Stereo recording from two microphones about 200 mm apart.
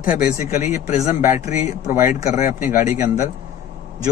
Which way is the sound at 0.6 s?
35° left (ahead or behind).